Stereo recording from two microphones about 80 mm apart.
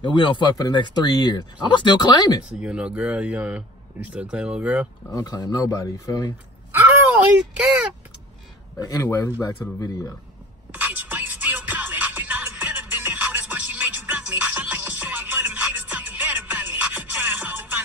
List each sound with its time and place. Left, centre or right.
0.0 s speech: left
1.1 s speech: left
2.6 s speech: centre
5.1 s speech: left
6.7 s a sound: right
7.5 s speech: centre
8.7 s speech: left
10.7 s music: right